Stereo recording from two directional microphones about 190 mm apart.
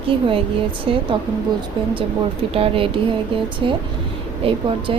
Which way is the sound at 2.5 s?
30° right (ahead or behind).